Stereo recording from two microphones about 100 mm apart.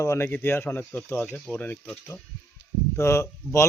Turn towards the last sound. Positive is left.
turn(degrees=30)  # may be behind; listen again after turning